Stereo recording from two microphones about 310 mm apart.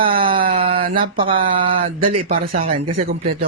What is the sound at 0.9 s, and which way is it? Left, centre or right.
Speech, right.